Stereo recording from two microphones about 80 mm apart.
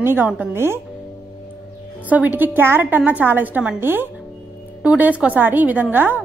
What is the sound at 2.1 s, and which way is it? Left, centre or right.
A woman's voice, right.